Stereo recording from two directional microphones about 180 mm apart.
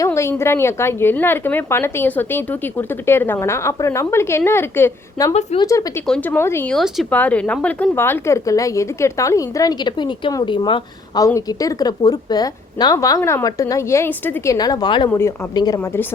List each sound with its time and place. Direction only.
0.0 s speech: 15° left (ahead or behind)
5.3 s a woman's voice: 35° left (ahead or behind)
5.5 s speech: 20° left (ahead or behind)
6.7 s a woman's voice: centre (ahead or behind); by 15.8 s 20° left (ahead or behind)